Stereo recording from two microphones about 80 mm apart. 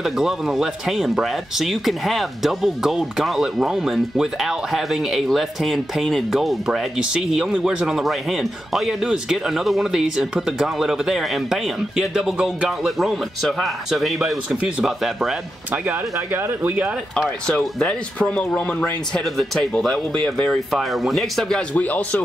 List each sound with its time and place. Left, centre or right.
0.0 s speech: centre
15.7 s speech: right
17.5 s speech: centre
20.7 s speech: centre
21.7 s speech: centre